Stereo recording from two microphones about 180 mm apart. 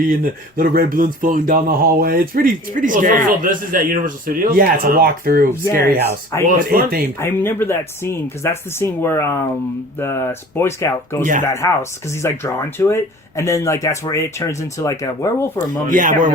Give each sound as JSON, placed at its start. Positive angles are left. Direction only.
{"t": 0.0, "sound": "speech", "side_deg": -55}
{"t": 6.7, "sound": "speech", "side_deg": -55}
{"t": 7.2, "sound": "speech", "side_deg": 10}
{"t": 15.9, "sound": "speech", "side_deg": -45}